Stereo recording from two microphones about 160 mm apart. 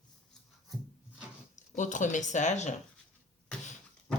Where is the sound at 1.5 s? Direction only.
50° left (ahead or behind).